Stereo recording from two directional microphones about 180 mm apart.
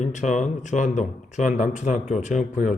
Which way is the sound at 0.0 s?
40° left (ahead or behind).